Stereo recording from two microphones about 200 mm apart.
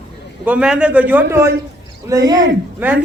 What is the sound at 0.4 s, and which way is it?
A man's voice, 5° right (ahead or behind).